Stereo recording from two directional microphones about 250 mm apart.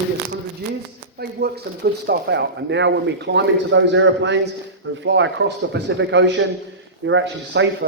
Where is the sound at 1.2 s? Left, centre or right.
Right.